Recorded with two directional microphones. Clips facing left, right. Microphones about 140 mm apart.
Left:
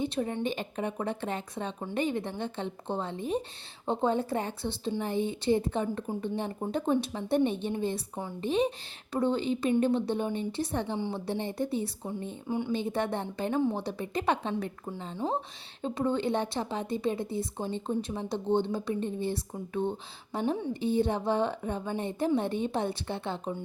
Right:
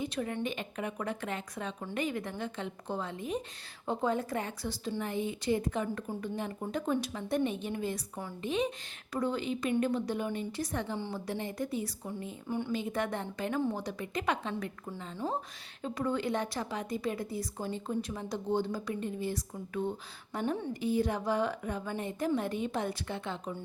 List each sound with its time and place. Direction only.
0.0 s a woman's voice: 30° left (ahead or behind)
12.5 s speech: 15° left (ahead or behind)
12.7 s a woman's voice: 30° left (ahead or behind)
15.1 s a woman's voice: 20° left (ahead or behind)